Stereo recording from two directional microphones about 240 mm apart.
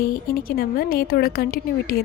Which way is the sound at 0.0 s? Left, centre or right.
Left.